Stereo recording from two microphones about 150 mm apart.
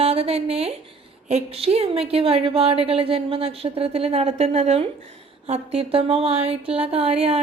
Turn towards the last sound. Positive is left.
turn(degrees=-40)  # may be behind; listen again after turning